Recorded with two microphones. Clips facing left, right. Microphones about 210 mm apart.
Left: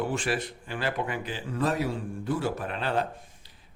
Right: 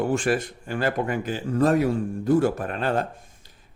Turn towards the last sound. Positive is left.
turn(degrees=-45)  # may be behind; listen again after turning